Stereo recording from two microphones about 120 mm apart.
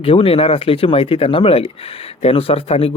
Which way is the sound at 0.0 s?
50° left (ahead or behind).